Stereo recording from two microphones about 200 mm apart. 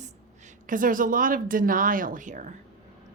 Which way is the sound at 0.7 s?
45° right (ahead or behind).